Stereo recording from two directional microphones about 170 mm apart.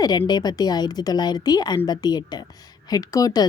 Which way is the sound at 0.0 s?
25° left (ahead or behind).